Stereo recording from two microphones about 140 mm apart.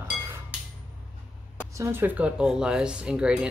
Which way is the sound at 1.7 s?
15° right (ahead or behind).